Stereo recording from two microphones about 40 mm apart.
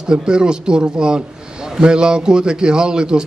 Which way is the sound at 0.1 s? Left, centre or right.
Right.